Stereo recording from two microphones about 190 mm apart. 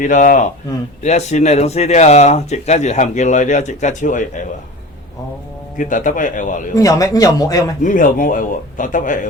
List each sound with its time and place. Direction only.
0.0 s speech: 40° left (ahead or behind)
5.7 s a man's voice: 45° left (ahead or behind)
6.7 s a man's voice: 20° left (ahead or behind)
7.8 s a man's voice: 45° left (ahead or behind)